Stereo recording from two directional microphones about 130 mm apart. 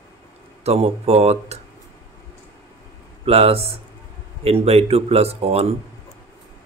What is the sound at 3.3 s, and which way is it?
Speech, 50° right (ahead or behind).